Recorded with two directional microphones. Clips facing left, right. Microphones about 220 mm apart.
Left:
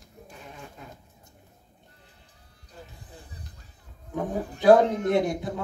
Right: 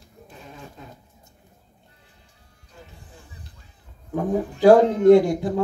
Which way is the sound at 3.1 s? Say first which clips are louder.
Left 2 dB; 35° left (ahead or behind).